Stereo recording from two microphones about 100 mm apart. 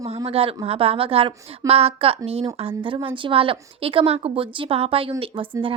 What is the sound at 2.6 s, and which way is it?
A woman's voice, 65° right (ahead or behind).